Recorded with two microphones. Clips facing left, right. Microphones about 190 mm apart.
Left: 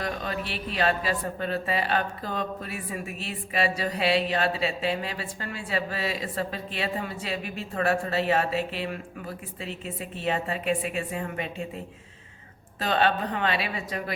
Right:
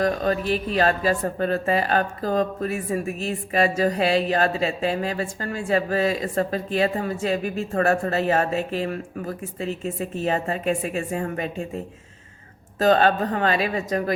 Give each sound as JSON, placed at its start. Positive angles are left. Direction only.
{"t": 0.0, "sound": "speech", "side_deg": -45}
{"t": 12.8, "sound": "speech", "side_deg": -45}